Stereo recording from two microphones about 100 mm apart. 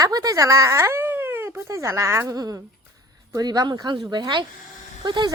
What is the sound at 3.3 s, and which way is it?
A woman's voice, 40° right (ahead or behind).